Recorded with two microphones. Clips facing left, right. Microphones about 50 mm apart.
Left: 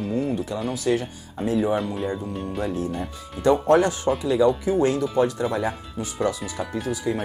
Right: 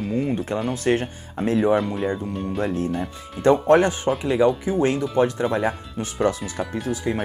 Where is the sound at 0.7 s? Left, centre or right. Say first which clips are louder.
Even; right.